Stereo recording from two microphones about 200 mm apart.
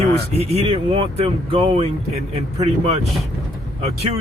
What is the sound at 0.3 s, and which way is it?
Speech, 30° right (ahead or behind).